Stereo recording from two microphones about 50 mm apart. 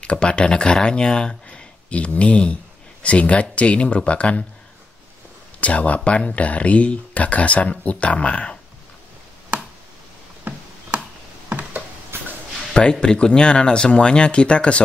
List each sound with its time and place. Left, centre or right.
0.0 s speech: left
5.6 s speech: left
11.4 s a sound: right
12.9 s speech: centre